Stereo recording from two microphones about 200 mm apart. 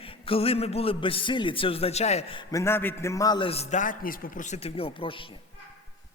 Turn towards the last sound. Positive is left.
turn(degrees=25)  # may be behind; listen again after turning